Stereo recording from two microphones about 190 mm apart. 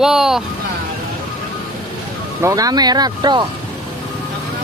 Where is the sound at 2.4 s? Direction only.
15° right (ahead or behind).